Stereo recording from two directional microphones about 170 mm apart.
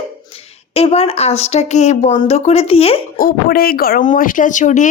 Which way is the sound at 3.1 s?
60° left (ahead or behind).